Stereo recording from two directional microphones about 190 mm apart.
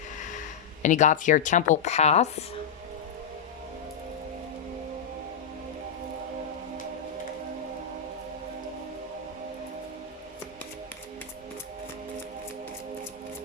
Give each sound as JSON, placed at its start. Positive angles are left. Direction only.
{"t": 0.8, "sound": "speech", "side_deg": 40}